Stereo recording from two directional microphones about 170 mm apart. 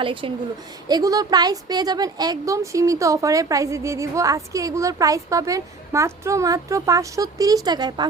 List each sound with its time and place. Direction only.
0.0 s a woman's voice: 30° right (ahead or behind)